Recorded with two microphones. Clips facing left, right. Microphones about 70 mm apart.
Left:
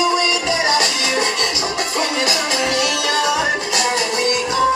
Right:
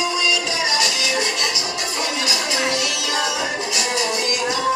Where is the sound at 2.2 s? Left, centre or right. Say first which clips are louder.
Left 3 dB; left.